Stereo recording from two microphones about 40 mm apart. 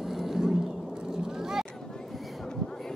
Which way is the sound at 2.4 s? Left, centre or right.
Centre.